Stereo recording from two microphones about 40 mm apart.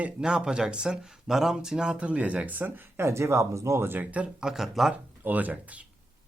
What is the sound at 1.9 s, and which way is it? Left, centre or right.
Speech, right.